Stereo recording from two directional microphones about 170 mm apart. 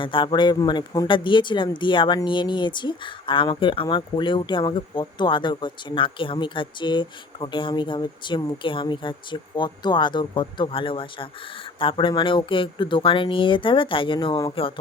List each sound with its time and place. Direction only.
0.0 s speech: 30° left (ahead or behind)